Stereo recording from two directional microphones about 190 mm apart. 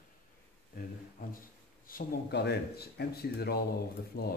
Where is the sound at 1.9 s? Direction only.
60° left (ahead or behind).